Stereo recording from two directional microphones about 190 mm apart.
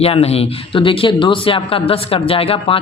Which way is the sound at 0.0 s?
30° left (ahead or behind).